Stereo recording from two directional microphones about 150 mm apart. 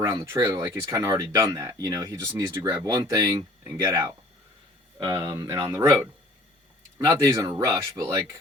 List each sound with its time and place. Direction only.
0.0 s speech: 25° right (ahead or behind)